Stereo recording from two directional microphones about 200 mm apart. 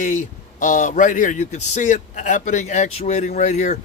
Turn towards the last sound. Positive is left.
turn(degrees=35)  # may be behind; listen again after turning